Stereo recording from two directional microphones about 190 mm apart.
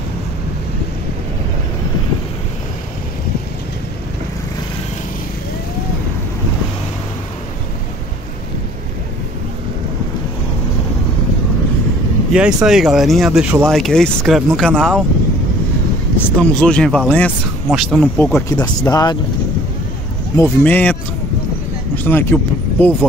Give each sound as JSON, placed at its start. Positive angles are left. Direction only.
{"t": 12.3, "sound": "speech", "side_deg": -5}
{"t": 16.2, "sound": "speech", "side_deg": 5}
{"t": 18.5, "sound": "speech", "side_deg": 20}
{"t": 20.4, "sound": "speech", "side_deg": 10}